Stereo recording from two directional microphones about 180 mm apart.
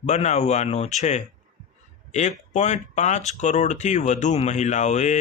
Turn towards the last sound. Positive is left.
turn(degrees=40)  # may be behind; listen again after turning